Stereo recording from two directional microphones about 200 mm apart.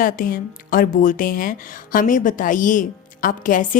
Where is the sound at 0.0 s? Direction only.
45° left (ahead or behind).